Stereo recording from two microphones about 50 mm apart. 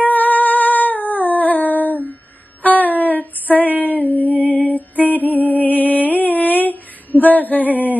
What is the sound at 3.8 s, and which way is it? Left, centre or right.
Music, left.